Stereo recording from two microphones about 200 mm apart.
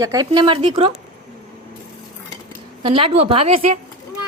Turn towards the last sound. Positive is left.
turn(degrees=-30)  # may be behind; listen again after turning